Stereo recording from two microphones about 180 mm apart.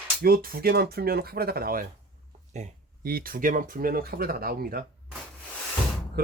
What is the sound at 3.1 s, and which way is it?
Speech, 55° right (ahead or behind).